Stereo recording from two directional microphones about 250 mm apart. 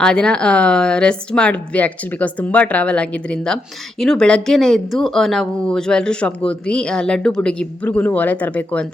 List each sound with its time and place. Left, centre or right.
0.0 s a woman's voice: centre